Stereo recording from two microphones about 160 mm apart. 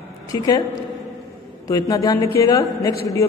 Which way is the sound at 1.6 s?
20° left (ahead or behind).